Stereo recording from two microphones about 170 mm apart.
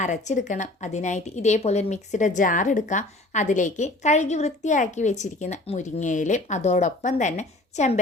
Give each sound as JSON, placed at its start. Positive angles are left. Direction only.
{"t": 0.0, "sound": "a woman's voice", "side_deg": 45}